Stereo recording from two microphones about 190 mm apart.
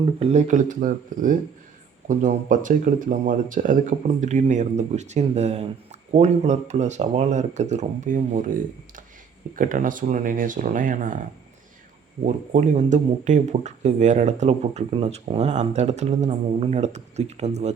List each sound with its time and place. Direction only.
0.2 s speech: 35° right (ahead or behind)
12.2 s speech: 40° right (ahead or behind)